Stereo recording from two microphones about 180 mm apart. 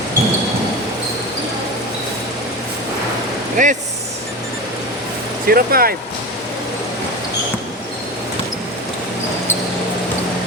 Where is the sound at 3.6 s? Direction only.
45° right (ahead or behind).